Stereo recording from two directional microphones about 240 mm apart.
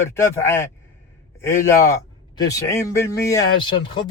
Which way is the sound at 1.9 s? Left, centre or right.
Centre.